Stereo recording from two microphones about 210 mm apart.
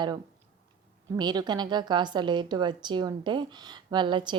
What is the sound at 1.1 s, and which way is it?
A woman's voice, 20° right (ahead or behind).